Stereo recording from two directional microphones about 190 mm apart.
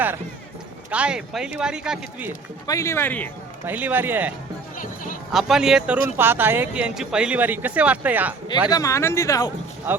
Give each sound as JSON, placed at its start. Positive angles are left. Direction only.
{"t": 0.9, "sound": "a man's voice", "side_deg": -5}
{"t": 2.6, "sound": "speech", "side_deg": 15}
{"t": 3.7, "sound": "speech", "side_deg": -10}
{"t": 8.7, "sound": "speech", "side_deg": 15}
{"t": 9.9, "sound": "speech", "side_deg": -10}